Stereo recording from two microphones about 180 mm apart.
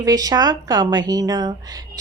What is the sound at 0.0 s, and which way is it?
Speech, 20° right (ahead or behind).